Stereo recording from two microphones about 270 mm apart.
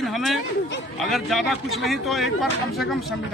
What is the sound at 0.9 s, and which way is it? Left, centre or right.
A man's voice, centre.